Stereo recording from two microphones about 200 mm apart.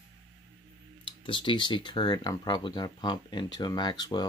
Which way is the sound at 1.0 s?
25° left (ahead or behind).